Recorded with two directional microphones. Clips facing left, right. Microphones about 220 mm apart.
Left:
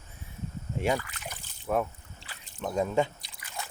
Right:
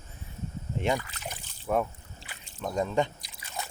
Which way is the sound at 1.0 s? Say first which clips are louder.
Right 2 dB; 25° right (ahead or behind).